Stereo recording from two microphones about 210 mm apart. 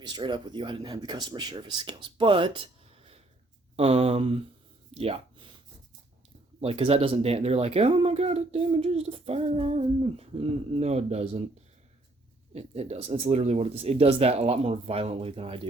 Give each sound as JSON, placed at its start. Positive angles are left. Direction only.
{"t": 0.0, "sound": "speech", "side_deg": -20}
{"t": 3.8, "sound": "speech", "side_deg": -30}
{"t": 4.9, "sound": "a sound", "side_deg": -30}
{"t": 6.6, "sound": "speech", "side_deg": -30}
{"t": 12.5, "sound": "speech", "side_deg": -30}